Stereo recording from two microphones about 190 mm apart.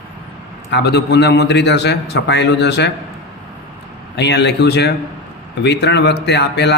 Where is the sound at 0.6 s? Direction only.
60° left (ahead or behind).